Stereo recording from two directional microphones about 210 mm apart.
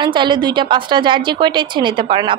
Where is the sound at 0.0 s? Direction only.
20° right (ahead or behind).